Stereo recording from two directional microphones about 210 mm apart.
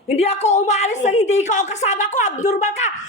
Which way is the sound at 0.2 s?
30° left (ahead or behind).